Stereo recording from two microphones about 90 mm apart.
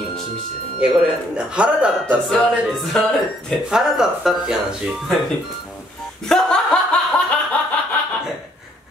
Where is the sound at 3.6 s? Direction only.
5° right (ahead or behind).